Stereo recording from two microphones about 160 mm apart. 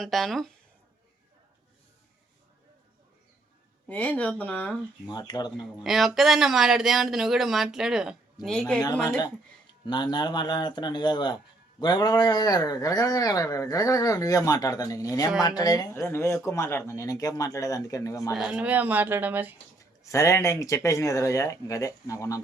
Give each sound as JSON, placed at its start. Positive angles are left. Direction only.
{"t": 0.0, "sound": "speech", "side_deg": 0}
{"t": 3.8, "sound": "speech", "side_deg": 10}
{"t": 5.0, "sound": "speech", "side_deg": 25}
{"t": 5.8, "sound": "speech", "side_deg": 0}
{"t": 9.0, "sound": "speech", "side_deg": 25}
{"t": 18.3, "sound": "speech", "side_deg": -5}
{"t": 20.1, "sound": "speech", "side_deg": 20}